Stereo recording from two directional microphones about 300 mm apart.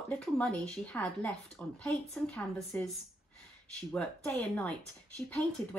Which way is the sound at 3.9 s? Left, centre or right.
Centre.